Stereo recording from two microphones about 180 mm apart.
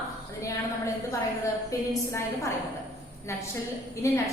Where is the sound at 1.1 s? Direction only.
15° left (ahead or behind).